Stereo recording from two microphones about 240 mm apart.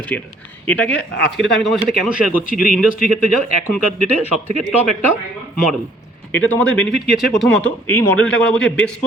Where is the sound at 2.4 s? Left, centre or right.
Left.